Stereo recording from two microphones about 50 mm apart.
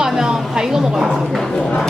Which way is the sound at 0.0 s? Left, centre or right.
Centre.